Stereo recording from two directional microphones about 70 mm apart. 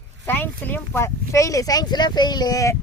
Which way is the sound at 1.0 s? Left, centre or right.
Left.